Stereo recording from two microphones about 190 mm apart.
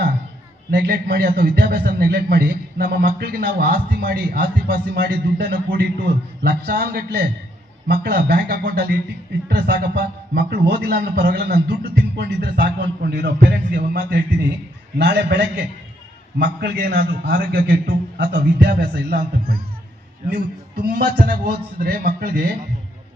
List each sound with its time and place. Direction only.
0.7 s a man's voice: 60° right (ahead or behind)